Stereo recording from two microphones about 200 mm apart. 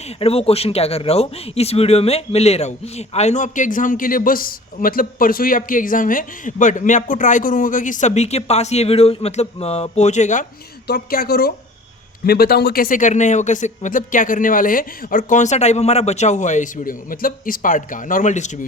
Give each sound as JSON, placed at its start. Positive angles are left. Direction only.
{"t": 0.2, "sound": "speech", "side_deg": 30}
{"t": 10.8, "sound": "speech", "side_deg": 50}